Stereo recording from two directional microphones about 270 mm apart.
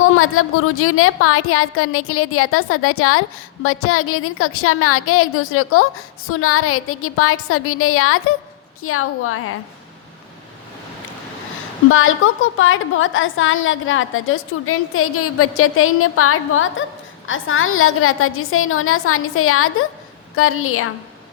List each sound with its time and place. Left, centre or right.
0.0 s a woman's voice: left
11.9 s a woman's voice: left